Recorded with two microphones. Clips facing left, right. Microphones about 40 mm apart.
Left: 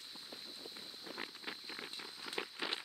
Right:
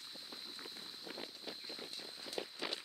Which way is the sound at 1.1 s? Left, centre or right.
Left.